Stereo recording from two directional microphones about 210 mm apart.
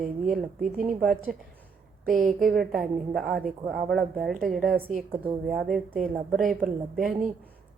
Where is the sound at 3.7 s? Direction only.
45° right (ahead or behind).